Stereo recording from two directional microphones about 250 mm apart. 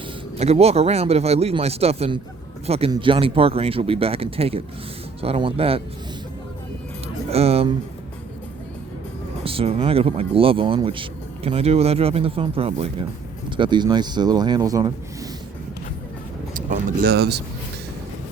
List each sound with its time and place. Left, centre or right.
0.3 s speech: right
7.3 s speech: right
9.4 s speech: right
16.6 s vehicle: right